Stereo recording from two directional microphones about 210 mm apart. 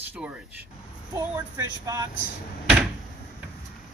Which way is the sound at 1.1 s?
15° right (ahead or behind).